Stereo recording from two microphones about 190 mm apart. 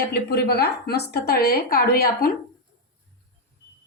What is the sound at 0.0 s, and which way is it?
Speech, 55° left (ahead or behind).